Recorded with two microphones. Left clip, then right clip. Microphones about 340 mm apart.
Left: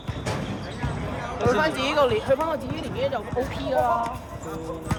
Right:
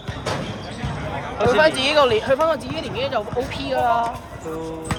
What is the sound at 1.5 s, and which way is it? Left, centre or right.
Speech, right.